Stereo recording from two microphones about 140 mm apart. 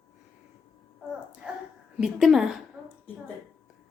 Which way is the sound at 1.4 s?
5° right (ahead or behind).